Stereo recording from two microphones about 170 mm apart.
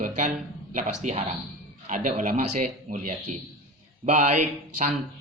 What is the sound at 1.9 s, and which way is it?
A man's voice, 45° right (ahead or behind).